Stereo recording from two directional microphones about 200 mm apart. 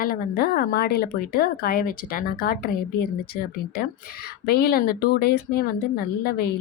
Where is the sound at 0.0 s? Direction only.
50° left (ahead or behind).